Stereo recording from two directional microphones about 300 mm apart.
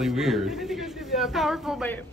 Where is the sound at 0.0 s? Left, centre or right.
Centre.